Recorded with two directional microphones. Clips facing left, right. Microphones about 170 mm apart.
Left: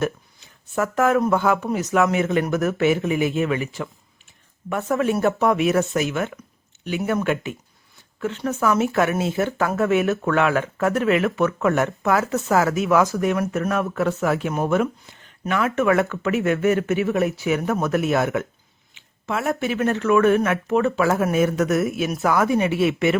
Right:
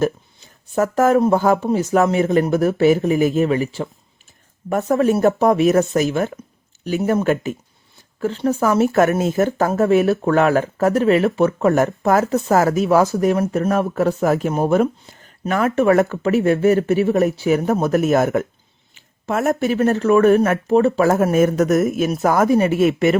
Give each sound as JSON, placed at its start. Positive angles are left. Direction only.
{"t": 0.0, "sound": "speech", "side_deg": -40}